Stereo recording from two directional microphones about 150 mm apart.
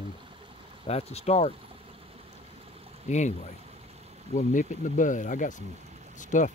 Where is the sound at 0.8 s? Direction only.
45° left (ahead or behind).